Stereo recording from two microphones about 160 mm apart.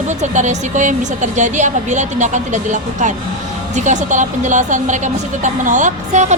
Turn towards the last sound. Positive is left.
turn(degrees=-50)  # may be behind; listen again after turning